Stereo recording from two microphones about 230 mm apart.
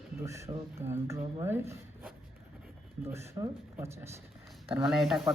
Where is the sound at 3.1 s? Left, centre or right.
Centre.